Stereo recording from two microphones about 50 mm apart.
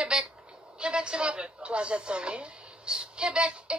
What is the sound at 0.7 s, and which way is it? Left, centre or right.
A man's voice, centre.